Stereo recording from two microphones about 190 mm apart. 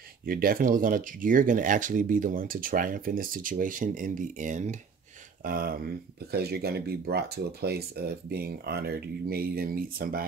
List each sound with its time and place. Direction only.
0.3 s speech: 50° right (ahead or behind)